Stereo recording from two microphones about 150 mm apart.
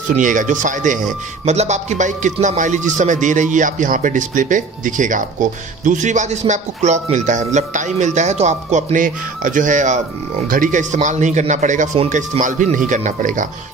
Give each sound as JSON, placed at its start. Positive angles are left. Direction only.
{"t": 0.1, "sound": "speech", "side_deg": -60}